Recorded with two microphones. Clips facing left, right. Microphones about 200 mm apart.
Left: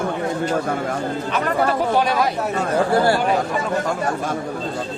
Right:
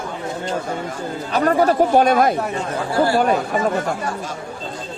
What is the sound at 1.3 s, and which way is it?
Speech, 45° right (ahead or behind).